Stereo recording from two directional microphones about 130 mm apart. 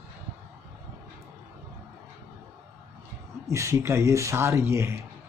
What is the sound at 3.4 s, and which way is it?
Speech, 20° right (ahead or behind).